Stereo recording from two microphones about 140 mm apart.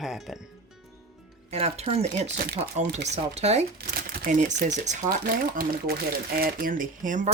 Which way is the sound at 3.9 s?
80° right.